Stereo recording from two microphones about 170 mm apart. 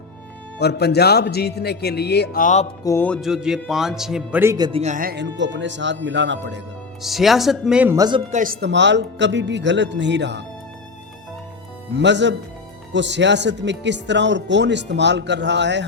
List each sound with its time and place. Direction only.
0.6 s a man's voice: 75° left (ahead or behind)
2.4 s music: 45° left (ahead or behind)
2.8 s music: 15° left (ahead or behind)
3.2 s a man's voice: 5° right (ahead or behind)
4.5 s speech: 25° right (ahead or behind)
4.8 s speech: 50° right (ahead or behind)
5.1 s speech: 90° right
7.0 s a man's voice: centre (ahead or behind)
7.9 s speech: 25° right (ahead or behind)
8.3 s speech: 50° right (ahead or behind)
8.6 s speech: 90° right
11.9 s speech: 90° right